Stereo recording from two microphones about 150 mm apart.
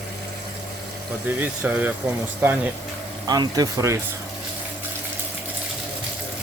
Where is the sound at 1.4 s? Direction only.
10° right (ahead or behind).